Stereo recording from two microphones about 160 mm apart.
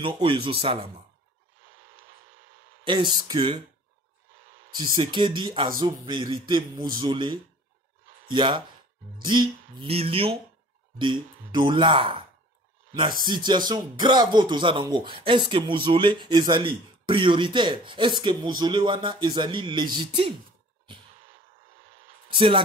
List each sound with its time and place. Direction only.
0.0 s speech: 35° right (ahead or behind)
2.8 s speech: 30° right (ahead or behind)
4.6 s speech: 30° right (ahead or behind)
22.3 s speech: 30° right (ahead or behind)